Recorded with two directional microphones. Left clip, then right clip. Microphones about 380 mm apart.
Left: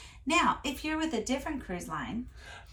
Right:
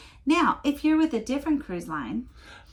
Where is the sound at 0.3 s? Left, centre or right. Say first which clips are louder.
Right 4 dB; centre.